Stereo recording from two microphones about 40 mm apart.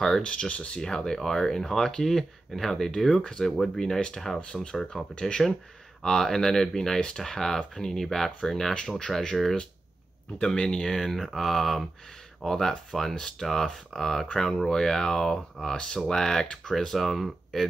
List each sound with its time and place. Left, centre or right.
0.2 s speech: left
0.7 s speech: centre